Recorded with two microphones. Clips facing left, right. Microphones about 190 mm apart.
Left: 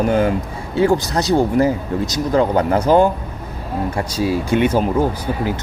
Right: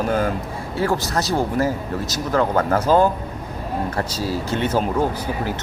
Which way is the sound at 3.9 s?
10° left (ahead or behind).